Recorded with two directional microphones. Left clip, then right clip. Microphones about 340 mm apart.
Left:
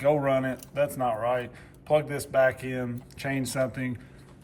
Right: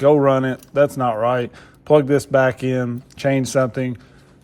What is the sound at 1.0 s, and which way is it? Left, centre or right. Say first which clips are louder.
Speech: right 8 dB; right.